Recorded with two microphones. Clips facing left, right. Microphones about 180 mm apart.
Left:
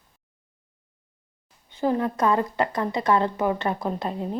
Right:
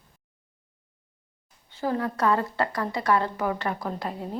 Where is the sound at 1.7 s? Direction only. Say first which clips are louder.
Left 4 dB; 20° left (ahead or behind).